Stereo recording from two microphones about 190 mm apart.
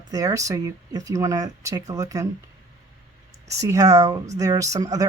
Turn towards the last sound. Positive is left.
turn(degrees=-20)  # may be behind; listen again after turning